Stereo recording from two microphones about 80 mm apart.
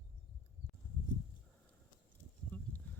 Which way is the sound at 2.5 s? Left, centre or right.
Left.